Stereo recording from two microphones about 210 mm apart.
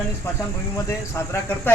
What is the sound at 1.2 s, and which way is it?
Speech, 10° left (ahead or behind).